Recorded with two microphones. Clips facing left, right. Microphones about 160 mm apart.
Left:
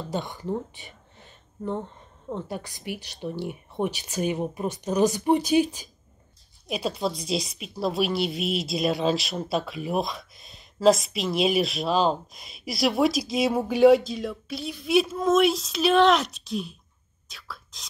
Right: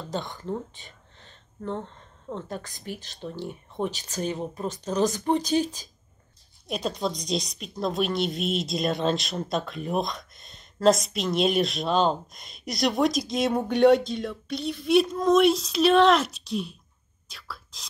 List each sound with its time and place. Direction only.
0.1 s speech: 10° left (ahead or behind)
6.7 s a woman's voice: 5° left (ahead or behind)
17.3 s whispering: centre (ahead or behind)